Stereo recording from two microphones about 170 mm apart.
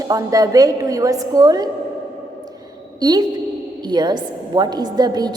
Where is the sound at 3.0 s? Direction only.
25° right (ahead or behind).